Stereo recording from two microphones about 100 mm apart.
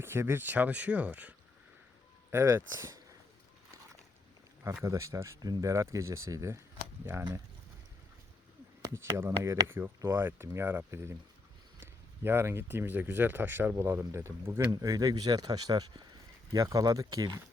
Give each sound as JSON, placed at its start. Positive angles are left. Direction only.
{"t": 0.0, "sound": "speech", "side_deg": -25}
{"t": 2.3, "sound": "speech", "side_deg": -25}
{"t": 4.7, "sound": "speech", "side_deg": -30}
{"t": 8.8, "sound": "speech", "side_deg": -30}
{"t": 14.7, "sound": "speech", "side_deg": -35}